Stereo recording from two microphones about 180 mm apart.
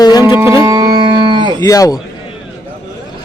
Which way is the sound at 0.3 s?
15° right (ahead or behind).